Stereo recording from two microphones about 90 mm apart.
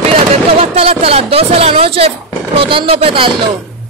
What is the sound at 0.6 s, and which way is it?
Speech, 90° right.